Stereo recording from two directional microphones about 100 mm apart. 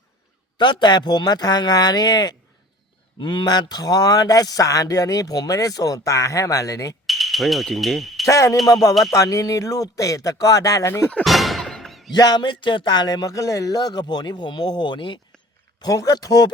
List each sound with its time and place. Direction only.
0.5 s speech: 50° left (ahead or behind); by 6.9 s 35° left (ahead or behind)
7.1 s speech: centre (ahead or behind)
8.3 s speech: 30° left (ahead or behind)
11.2 s music: centre (ahead or behind)
12.1 s speech: 45° left (ahead or behind)
15.8 s speech: 40° left (ahead or behind)